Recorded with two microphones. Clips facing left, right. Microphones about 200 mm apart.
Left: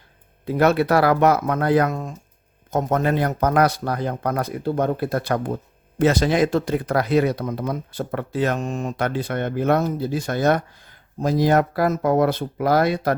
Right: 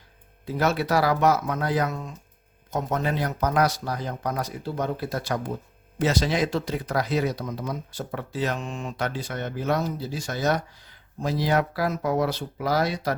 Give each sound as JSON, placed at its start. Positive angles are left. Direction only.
{"t": 0.4, "sound": "speech", "side_deg": 60}